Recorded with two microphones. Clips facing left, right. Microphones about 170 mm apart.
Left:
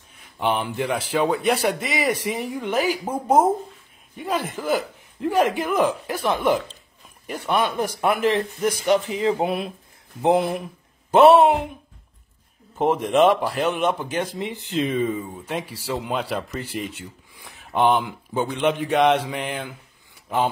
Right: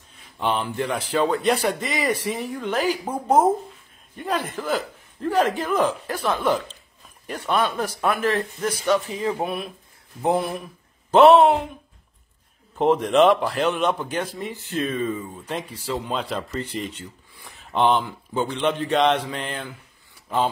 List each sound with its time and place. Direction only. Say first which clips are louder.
0.4 s a man's voice: left 1 dB; 15° left (ahead or behind)
12.7 s a man's voice: right 2 dB; 15° left (ahead or behind)
13.1 s a man's voice: left 1 dB; centre (ahead or behind)
14.2 s a man's voice: left 2 dB; 20° left (ahead or behind)